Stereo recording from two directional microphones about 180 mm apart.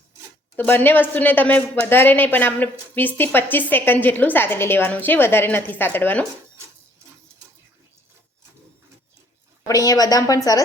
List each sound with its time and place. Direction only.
0.5 s speech: 10° left (ahead or behind)
9.6 s a woman's voice: 20° left (ahead or behind)